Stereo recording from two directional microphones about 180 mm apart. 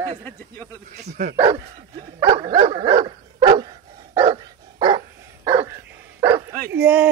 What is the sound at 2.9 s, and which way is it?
Dog, 25° right (ahead or behind).